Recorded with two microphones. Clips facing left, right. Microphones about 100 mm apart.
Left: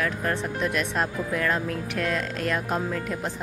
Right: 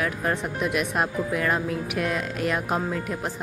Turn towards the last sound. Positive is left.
turn(degrees=-5)  # may be behind; listen again after turning